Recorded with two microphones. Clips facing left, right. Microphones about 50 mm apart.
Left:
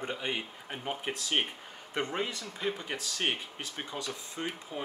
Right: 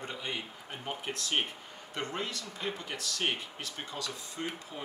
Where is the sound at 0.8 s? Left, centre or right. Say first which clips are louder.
Left 2 dB; centre.